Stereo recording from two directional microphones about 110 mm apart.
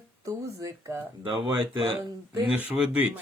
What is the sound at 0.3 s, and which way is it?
Speech, 30° right (ahead or behind).